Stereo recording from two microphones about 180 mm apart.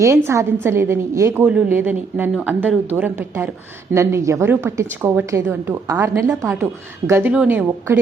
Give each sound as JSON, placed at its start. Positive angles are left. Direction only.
{"t": 0.3, "sound": "a woman's voice", "side_deg": -15}